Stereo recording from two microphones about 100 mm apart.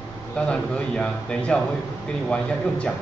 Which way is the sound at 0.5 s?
10° left (ahead or behind).